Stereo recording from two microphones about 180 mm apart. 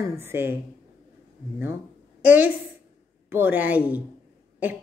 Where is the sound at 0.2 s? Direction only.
15° right (ahead or behind).